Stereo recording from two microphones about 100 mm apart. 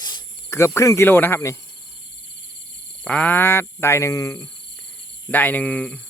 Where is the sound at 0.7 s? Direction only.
30° left (ahead or behind).